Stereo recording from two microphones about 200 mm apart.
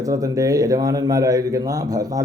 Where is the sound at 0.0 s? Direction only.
15° right (ahead or behind).